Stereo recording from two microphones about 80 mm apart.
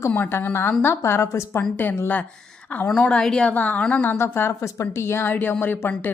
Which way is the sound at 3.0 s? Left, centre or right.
Centre.